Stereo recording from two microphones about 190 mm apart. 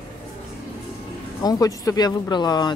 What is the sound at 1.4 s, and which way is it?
Speech, 20° left (ahead or behind).